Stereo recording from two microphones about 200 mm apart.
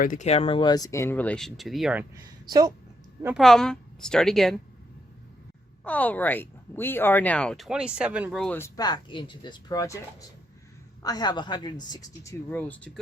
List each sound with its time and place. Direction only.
0.0 s speech: 40° left (ahead or behind); by 2.0 s 5° right (ahead or behind)
2.5 s speech: 20° right (ahead or behind)
3.2 s a woman's voice: centre (ahead or behind)
5.8 s speech: 10° left (ahead or behind)